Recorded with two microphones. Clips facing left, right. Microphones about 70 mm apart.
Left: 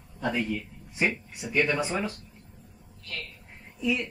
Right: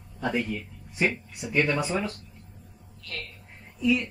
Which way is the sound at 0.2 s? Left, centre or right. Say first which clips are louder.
Right 1 dB; centre.